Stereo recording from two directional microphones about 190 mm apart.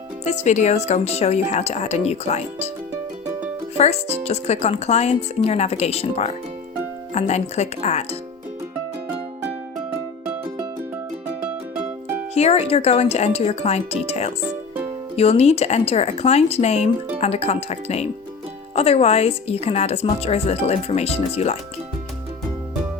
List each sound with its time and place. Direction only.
0.3 s speech: 40° left (ahead or behind)
3.8 s speech: 35° left (ahead or behind)
12.3 s speech: 35° left (ahead or behind)